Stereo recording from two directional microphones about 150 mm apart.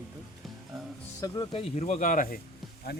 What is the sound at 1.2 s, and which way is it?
Speech, 30° left (ahead or behind).